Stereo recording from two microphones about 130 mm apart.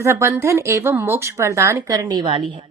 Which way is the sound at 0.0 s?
20° right (ahead or behind).